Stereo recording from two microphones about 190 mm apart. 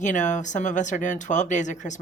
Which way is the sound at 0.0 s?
40° left (ahead or behind).